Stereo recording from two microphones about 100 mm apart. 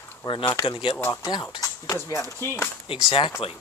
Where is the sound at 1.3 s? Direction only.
45° left (ahead or behind).